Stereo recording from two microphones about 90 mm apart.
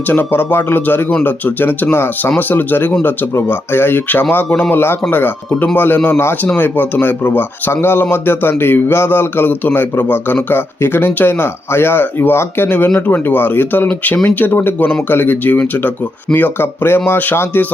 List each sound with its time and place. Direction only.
0.1 s speech: 25° left (ahead or behind)